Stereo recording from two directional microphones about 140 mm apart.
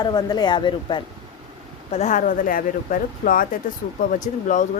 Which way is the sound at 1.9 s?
55° left (ahead or behind).